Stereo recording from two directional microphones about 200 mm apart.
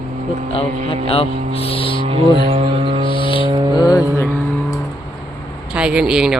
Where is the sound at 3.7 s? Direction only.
20° left (ahead or behind).